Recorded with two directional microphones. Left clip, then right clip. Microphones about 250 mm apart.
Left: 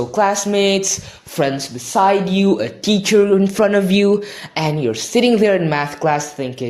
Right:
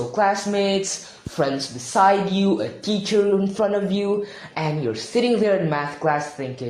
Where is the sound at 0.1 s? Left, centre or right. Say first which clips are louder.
Left 3 dB; left.